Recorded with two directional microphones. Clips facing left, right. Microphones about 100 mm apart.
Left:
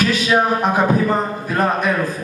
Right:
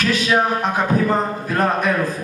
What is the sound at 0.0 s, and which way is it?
A man's voice, 5° left (ahead or behind).